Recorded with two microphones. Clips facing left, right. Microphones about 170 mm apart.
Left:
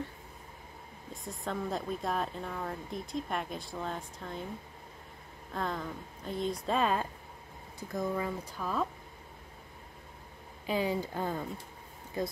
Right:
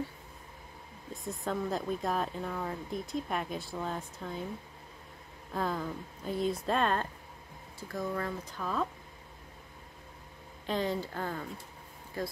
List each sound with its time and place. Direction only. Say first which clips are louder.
1.1 s speech: right 2 dB; centre (ahead or behind)
5.5 s speech: right 2 dB; 5° right (ahead or behind)
10.7 s speech: left 1 dB; 10° left (ahead or behind)